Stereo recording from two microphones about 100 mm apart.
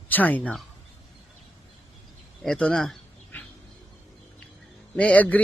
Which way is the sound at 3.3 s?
15° left (ahead or behind).